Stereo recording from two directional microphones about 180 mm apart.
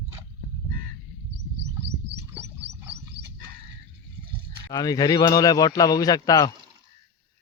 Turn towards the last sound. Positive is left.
turn(degrees=20)  # may be behind; listen again after turning